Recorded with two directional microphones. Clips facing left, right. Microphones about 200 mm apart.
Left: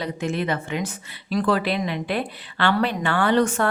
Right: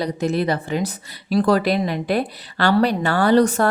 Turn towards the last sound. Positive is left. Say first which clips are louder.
# right 4 dB
turn(degrees=-35)  # may be behind; listen again after turning